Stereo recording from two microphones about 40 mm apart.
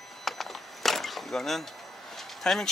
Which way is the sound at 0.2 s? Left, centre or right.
Centre.